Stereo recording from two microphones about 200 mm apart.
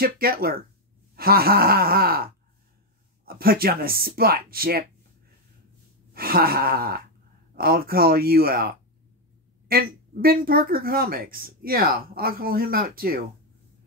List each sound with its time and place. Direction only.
0.0 s a woman's voice: 50° right (ahead or behind)
6.1 s a woman's voice: 50° right (ahead or behind)